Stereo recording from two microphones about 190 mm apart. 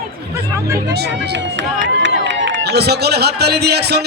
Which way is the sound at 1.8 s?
70° right (ahead or behind).